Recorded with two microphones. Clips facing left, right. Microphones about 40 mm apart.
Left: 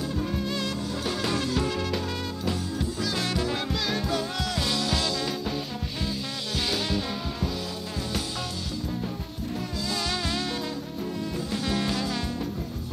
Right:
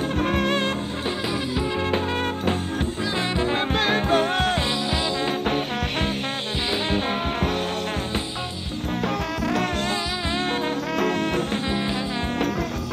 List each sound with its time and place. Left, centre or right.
0.2 s music: right
1.3 s music: centre
3.2 s music: right
11.0 s music: right
11.6 s music: right